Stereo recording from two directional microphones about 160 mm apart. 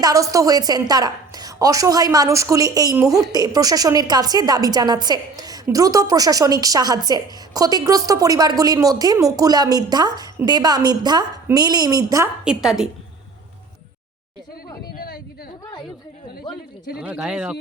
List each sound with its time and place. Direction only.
0.0 s a woman's voice: 20° right (ahead or behind)
12.5 s speech: 5° right (ahead or behind)
14.9 s a sound: 70° left (ahead or behind)
17.0 s speech: 5° right (ahead or behind)